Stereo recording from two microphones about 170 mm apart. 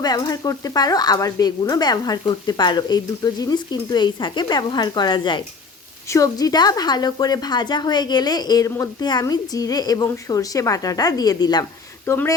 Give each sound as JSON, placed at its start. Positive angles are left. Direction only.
{"t": 0.0, "sound": "speech", "side_deg": 25}